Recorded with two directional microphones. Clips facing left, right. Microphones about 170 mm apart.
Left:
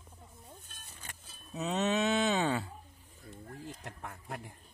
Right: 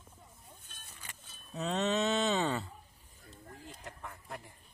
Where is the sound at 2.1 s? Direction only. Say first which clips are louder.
Left 1 dB; 10° left (ahead or behind).